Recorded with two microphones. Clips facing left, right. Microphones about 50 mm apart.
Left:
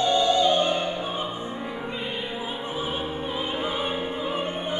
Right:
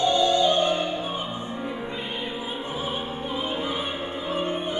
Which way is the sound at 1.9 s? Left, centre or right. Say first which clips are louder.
Even; centre.